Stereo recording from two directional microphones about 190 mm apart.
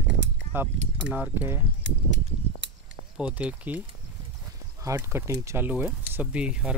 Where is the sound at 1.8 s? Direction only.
75° right (ahead or behind).